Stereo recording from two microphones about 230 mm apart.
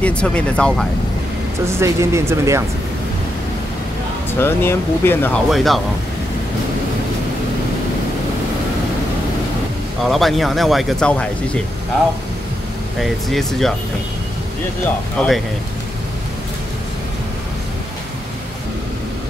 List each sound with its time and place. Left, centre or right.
0.0 s speech: centre
1.8 s speech: centre
4.4 s speech: centre
10.0 s speech: centre
13.0 s speech: centre
15.2 s speech: centre